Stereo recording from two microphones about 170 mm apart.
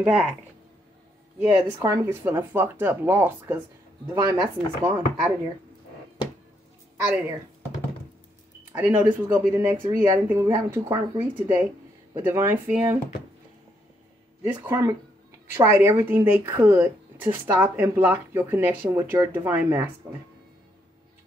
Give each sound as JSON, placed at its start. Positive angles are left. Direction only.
{"t": 0.0, "sound": "speech", "side_deg": -5}
{"t": 1.4, "sound": "a woman's voice", "side_deg": -15}
{"t": 8.7, "sound": "a woman's voice", "side_deg": -10}
{"t": 14.7, "sound": "a woman's voice", "side_deg": -20}